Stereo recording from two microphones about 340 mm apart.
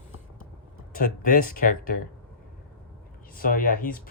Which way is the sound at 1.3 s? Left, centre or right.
Left.